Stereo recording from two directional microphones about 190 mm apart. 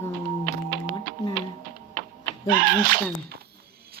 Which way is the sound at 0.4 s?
45° right (ahead or behind).